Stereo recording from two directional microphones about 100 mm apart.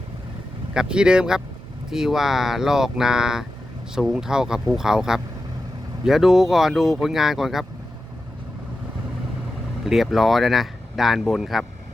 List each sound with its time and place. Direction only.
0.7 s speech: 10° right (ahead or behind)
9.8 s speech: centre (ahead or behind)